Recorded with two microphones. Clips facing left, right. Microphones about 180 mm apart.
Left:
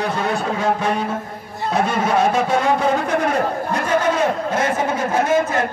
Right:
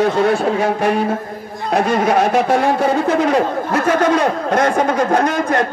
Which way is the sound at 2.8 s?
75° right (ahead or behind).